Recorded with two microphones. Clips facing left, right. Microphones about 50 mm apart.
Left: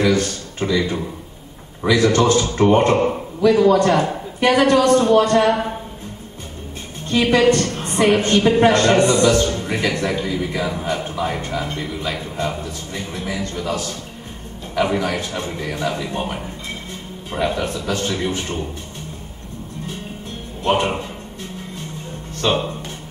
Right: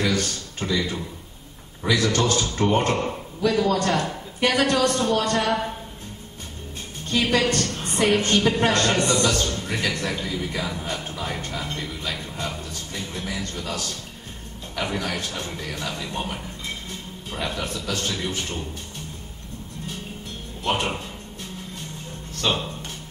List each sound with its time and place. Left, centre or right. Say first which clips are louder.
0.2 s a man's voice: left 6 dB; left
7.1 s a woman's voice: left 7 dB; left
9.0 s speech: left 7 dB; centre
9.3 s a woman's voice: left 7 dB; left
20.7 s a woman's voice: left 7 dB; left
22.4 s speech: left 5 dB; centre